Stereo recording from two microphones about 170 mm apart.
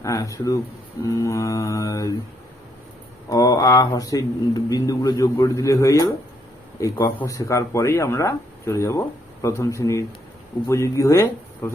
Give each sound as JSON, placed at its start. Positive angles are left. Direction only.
{"t": 0.0, "sound": "speech", "side_deg": 20}
{"t": 3.2, "sound": "speech", "side_deg": 20}